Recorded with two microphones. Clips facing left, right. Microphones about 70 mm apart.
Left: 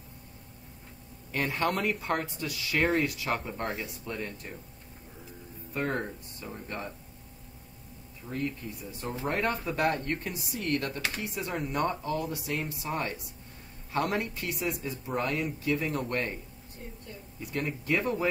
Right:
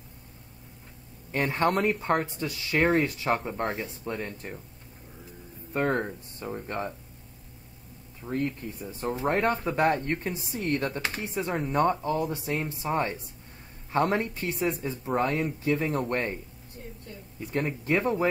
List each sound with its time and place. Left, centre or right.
1.3 s speech: right
5.7 s speech: right
8.2 s speech: right
17.4 s speech: right